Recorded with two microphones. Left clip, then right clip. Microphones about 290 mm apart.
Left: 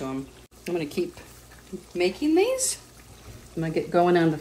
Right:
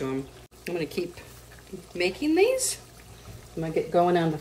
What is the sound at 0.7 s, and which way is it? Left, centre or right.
Speech, centre.